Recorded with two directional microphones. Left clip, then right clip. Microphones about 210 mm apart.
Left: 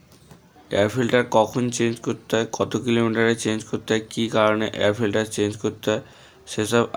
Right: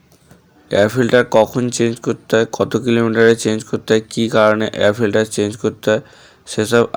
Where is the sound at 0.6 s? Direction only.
25° right (ahead or behind).